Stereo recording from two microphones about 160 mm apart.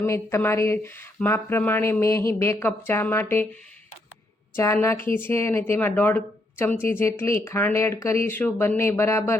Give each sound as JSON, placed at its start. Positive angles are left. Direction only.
{"t": 0.0, "sound": "speech", "side_deg": 15}
{"t": 4.5, "sound": "speech", "side_deg": 15}